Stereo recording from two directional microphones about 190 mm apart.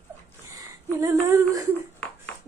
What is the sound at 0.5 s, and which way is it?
Speech, 15° right (ahead or behind).